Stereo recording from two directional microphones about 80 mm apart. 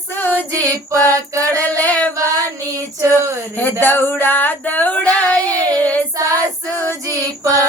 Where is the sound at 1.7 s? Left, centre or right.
Centre.